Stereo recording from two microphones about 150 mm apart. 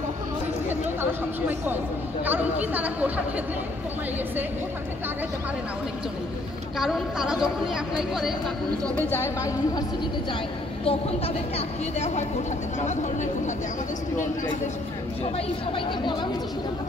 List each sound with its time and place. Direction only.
2.2 s a woman's voice: 10° right (ahead or behind)
6.8 s a woman's voice: 5° right (ahead or behind)
9.1 s a woman's voice: 15° left (ahead or behind)
10.9 s a woman's voice: 40° left (ahead or behind)
15.3 s speech: 35° left (ahead or behind)